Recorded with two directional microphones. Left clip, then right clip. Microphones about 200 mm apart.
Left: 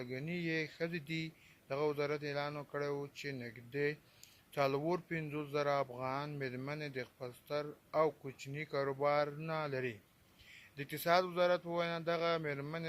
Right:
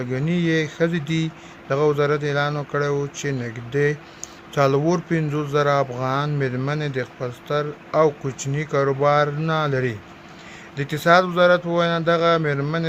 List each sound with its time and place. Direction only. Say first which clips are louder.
0.1 s speech: right 17 dB; 20° left (ahead or behind)